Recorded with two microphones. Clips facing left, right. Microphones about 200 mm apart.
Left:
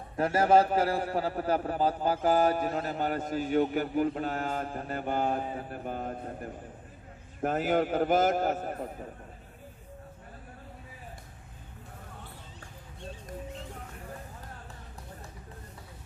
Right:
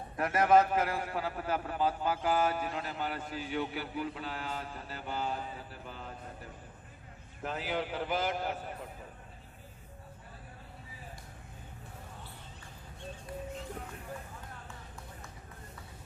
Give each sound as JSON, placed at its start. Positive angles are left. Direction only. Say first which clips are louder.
{"t": 0.2, "sound": "a man's voice", "louder": "left 3 dB", "side_deg": 30}